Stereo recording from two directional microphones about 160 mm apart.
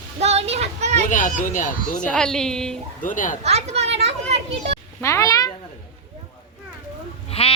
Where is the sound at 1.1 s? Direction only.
55° left (ahead or behind).